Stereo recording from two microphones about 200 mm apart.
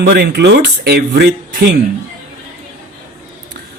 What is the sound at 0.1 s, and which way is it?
A man's voice, 55° right (ahead or behind).